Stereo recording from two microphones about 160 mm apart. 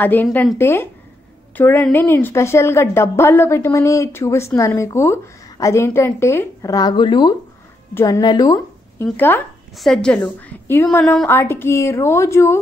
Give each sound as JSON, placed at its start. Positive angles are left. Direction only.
{"t": 0.0, "sound": "a woman's voice", "side_deg": 10}
{"t": 10.9, "sound": "a woman's voice", "side_deg": 0}
{"t": 11.2, "sound": "a woman's voice", "side_deg": 15}